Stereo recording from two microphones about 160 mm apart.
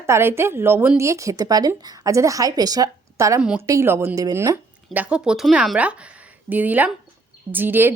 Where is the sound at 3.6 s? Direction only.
15° right (ahead or behind).